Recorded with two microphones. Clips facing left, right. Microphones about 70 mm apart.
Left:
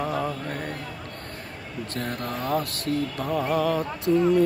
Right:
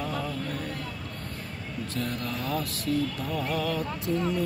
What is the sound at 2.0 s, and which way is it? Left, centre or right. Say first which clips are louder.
Music: left 2 dB; left.